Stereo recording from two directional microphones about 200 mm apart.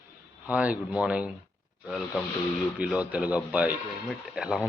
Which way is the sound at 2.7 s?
5° right (ahead or behind).